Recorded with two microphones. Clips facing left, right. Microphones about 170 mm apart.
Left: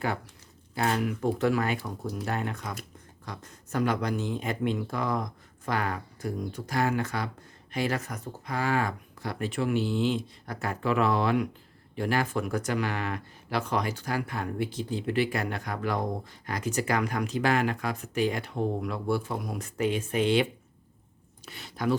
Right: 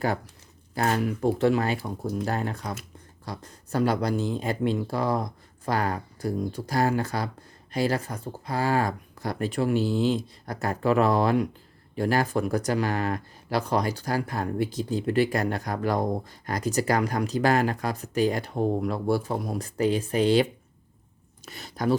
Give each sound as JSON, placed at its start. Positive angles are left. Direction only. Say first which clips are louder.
{"t": 0.8, "sound": "speech", "louder": "right 3 dB", "side_deg": -35}